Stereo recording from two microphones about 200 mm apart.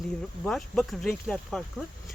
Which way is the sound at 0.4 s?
5° left (ahead or behind).